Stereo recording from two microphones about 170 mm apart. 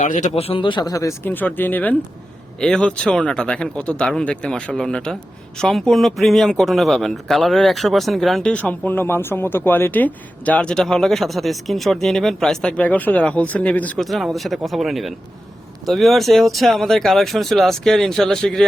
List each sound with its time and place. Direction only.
0.0 s speech: 45° left (ahead or behind); by 18.6 s 5° left (ahead or behind)